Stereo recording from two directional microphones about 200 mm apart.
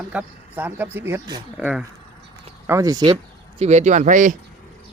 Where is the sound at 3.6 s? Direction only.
35° right (ahead or behind).